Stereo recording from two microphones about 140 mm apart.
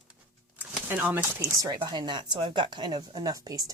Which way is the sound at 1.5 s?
25° right (ahead or behind).